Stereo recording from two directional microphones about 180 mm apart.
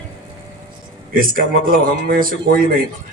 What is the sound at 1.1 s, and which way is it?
A man's voice, 50° right (ahead or behind).